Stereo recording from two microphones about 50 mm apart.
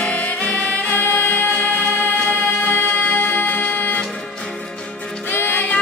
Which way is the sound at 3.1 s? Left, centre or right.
Left.